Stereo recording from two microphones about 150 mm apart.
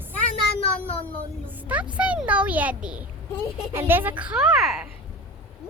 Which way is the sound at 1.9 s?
10° right (ahead or behind).